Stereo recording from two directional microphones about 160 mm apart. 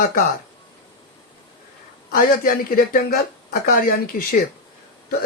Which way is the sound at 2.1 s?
60° left (ahead or behind).